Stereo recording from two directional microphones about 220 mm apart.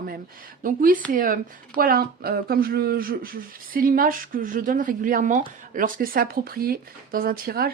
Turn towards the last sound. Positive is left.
turn(degrees=-45)  # may be behind; listen again after turning